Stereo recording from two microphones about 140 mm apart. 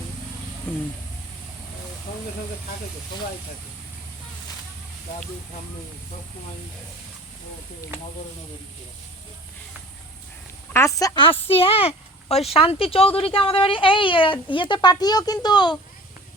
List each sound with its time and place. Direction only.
10.7 s speech: 20° left (ahead or behind)
11.2 s a woman's voice: 40° left (ahead or behind)